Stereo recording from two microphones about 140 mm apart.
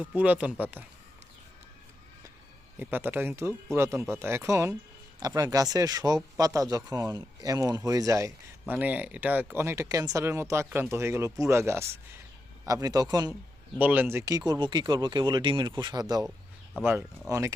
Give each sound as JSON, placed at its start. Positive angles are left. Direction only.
{"t": 0.0, "sound": "speech", "side_deg": -10}
{"t": 2.7, "sound": "speech", "side_deg": -15}
{"t": 8.7, "sound": "speech", "side_deg": -10}
{"t": 13.7, "sound": "speech", "side_deg": -10}